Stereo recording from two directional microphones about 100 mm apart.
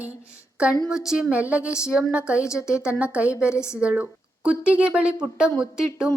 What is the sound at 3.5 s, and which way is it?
Speech, 25° left (ahead or behind).